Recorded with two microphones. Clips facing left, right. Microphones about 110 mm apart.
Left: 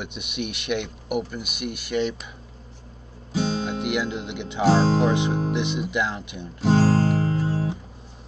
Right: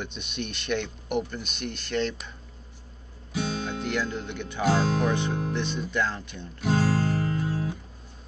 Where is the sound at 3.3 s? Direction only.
30° left (ahead or behind).